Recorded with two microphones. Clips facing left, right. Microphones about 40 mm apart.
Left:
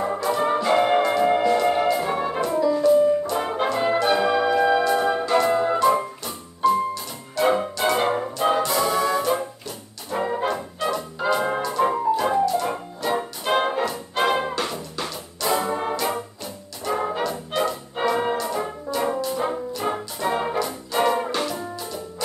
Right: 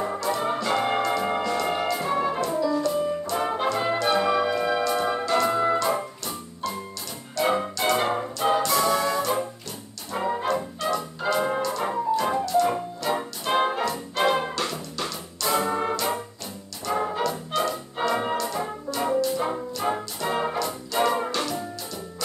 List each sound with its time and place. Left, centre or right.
0.0 s music: centre
6.6 s music: centre
10.1 s brass instrument: centre
11.4 s music: centre
16.8 s music: centre